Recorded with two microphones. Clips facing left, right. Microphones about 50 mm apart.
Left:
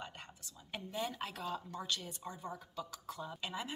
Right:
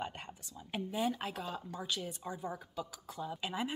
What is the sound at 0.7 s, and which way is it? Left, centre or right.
Speech, centre.